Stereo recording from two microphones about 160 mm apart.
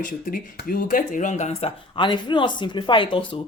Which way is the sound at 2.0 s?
30° left (ahead or behind).